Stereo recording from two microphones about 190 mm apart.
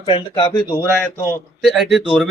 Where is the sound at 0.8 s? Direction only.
10° left (ahead or behind).